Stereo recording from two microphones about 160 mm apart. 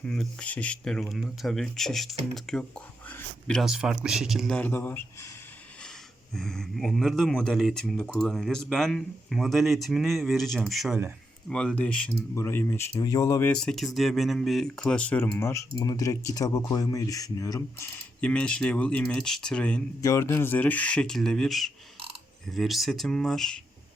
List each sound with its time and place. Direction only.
0.0 s speech: 5° left (ahead or behind)
6.3 s speech: 5° left (ahead or behind); by 13.5 s 20° left (ahead or behind)
13.5 s speech: 5° left (ahead or behind)
20.0 s speech: 20° left (ahead or behind)